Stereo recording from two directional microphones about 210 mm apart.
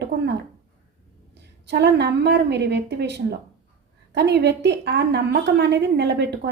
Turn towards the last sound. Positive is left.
turn(degrees=-55)  # may be behind; listen again after turning